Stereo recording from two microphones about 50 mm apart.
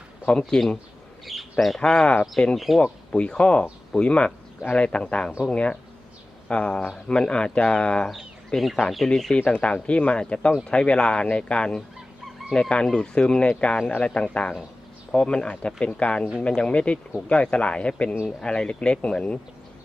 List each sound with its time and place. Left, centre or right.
0.3 s speech: centre
1.3 s speech: centre
3.1 s speech: centre
9.5 s speech: left
12.2 s chicken: centre
12.5 s speech: centre